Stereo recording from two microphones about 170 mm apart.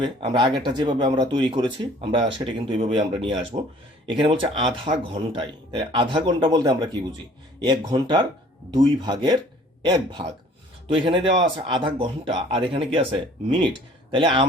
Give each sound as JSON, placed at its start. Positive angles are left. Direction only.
{"t": 0.0, "sound": "speech", "side_deg": -25}